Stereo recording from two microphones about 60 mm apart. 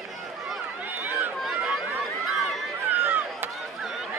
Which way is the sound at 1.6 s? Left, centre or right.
Right.